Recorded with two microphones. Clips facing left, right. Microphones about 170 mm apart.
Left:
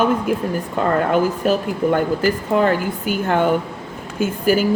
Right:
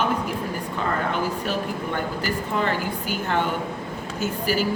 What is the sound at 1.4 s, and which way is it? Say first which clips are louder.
Speech: left 9 dB; 45° left (ahead or behind).